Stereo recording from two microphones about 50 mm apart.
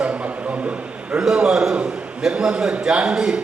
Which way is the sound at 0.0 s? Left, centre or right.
Right.